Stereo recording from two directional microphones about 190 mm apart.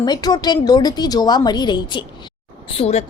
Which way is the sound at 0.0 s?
20° left (ahead or behind).